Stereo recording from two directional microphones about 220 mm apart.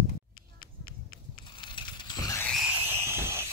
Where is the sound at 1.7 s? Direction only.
20° left (ahead or behind).